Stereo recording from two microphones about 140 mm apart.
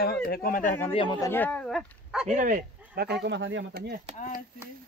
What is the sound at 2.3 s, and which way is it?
Speech, 70° right (ahead or behind).